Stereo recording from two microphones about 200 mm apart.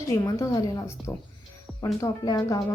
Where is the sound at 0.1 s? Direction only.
15° left (ahead or behind).